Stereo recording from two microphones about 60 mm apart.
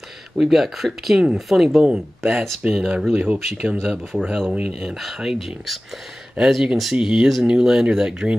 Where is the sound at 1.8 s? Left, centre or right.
Centre.